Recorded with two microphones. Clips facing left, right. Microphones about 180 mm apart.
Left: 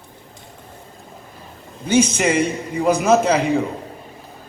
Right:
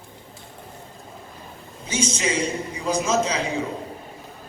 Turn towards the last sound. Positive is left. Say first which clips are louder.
# left 6 dB
turn(degrees=60)  # may be behind; listen again after turning